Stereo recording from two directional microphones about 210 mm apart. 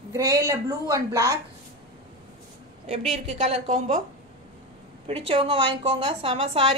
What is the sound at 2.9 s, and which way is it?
A woman's voice, 30° right (ahead or behind).